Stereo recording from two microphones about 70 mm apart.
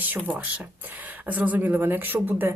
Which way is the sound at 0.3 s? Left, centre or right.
Right.